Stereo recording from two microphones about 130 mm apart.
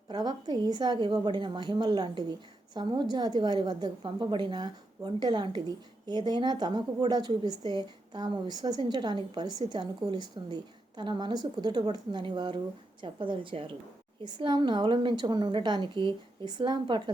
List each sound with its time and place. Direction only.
0.1 s a woman's voice: 35° right (ahead or behind)